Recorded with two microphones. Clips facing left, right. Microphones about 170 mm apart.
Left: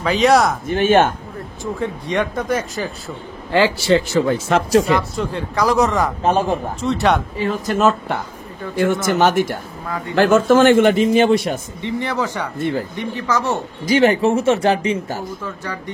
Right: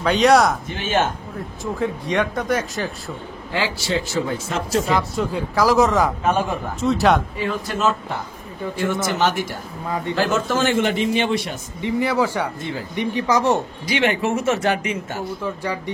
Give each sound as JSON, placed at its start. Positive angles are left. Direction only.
{"t": 0.0, "sound": "speech", "side_deg": 0}
{"t": 0.7, "sound": "a man's voice", "side_deg": 50}
{"t": 1.6, "sound": "speech", "side_deg": 0}
{"t": 3.5, "sound": "speech", "side_deg": 65}
{"t": 4.8, "sound": "speech", "side_deg": 0}
{"t": 6.2, "sound": "a man's voice", "side_deg": 30}
{"t": 6.8, "sound": "speech", "side_deg": 0}
{"t": 7.4, "sound": "a man's voice", "side_deg": 40}
{"t": 9.8, "sound": "speech", "side_deg": -20}
{"t": 10.1, "sound": "a man's voice", "side_deg": 55}
{"t": 11.8, "sound": "speech", "side_deg": -10}
{"t": 13.8, "sound": "a man's voice", "side_deg": 40}
{"t": 15.4, "sound": "speech", "side_deg": -10}